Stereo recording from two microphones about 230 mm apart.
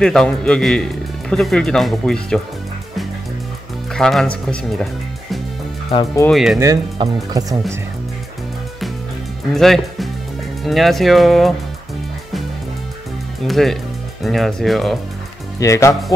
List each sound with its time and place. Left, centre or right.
0.0 s speech: centre
3.9 s speech: centre
6.3 s speech: centre
6.6 s speech: centre
9.5 s speech: centre
13.5 s speech: centre
15.6 s speech: centre